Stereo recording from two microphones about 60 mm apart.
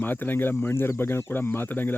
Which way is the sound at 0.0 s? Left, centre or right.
Left.